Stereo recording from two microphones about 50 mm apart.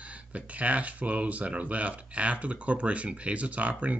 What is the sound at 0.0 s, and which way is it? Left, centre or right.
Speech, right.